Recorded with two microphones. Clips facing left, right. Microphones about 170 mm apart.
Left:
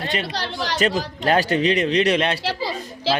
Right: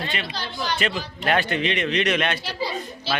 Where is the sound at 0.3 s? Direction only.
85° left.